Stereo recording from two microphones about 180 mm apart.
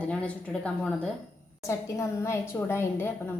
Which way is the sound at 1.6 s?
15° left (ahead or behind).